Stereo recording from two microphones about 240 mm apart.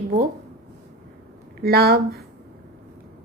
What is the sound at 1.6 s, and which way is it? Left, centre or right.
Speech, right.